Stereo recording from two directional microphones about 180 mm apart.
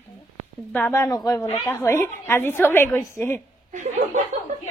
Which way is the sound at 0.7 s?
15° left (ahead or behind).